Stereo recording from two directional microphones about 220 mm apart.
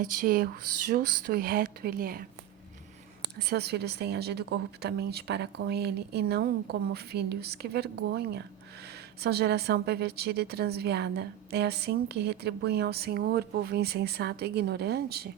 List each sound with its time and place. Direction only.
0.0 s a woman's voice: 40° right (ahead or behind)
3.3 s a woman's voice: 45° right (ahead or behind)